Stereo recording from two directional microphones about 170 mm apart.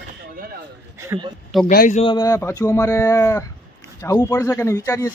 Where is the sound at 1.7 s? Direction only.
60° left (ahead or behind).